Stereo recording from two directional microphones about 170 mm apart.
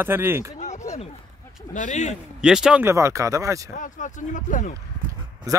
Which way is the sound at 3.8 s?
50° left (ahead or behind).